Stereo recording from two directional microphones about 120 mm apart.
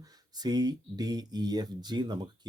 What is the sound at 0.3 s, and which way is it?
Speech, 35° right (ahead or behind).